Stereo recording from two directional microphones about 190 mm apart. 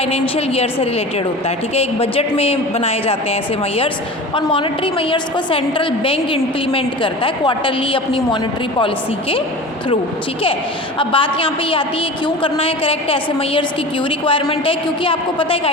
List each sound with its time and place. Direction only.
0.0 s speech: 30° left (ahead or behind)
4.4 s a woman's voice: 25° left (ahead or behind)
10.9 s a woman's voice: 25° left (ahead or behind)